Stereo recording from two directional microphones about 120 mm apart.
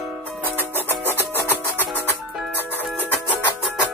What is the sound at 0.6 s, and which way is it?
Music, 15° left (ahead or behind).